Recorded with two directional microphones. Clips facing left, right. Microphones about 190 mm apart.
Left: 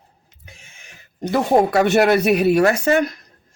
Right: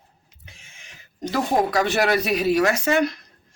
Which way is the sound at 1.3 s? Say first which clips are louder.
Left 5 dB; 60° left (ahead or behind).